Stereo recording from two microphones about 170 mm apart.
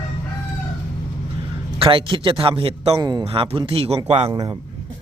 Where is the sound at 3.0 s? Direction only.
25° right (ahead or behind).